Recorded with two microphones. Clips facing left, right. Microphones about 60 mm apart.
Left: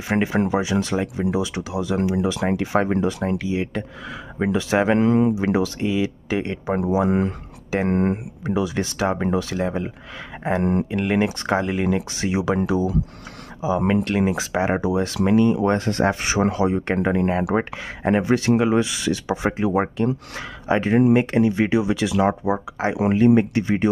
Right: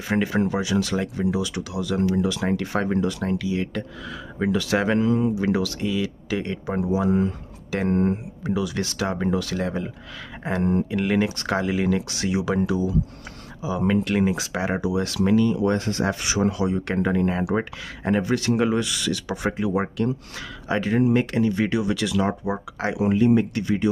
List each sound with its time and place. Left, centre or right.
0.1 s speech: left
1.0 s speech: centre
1.3 s speech: left
4.9 s speech: left
5.3 s speech: left
7.1 s speech: left
8.5 s speech: left
10.6 s speech: left
11.1 s speech: left
11.6 s speech: centre
11.9 s speech: left
22.9 s speech: left
23.5 s speech: left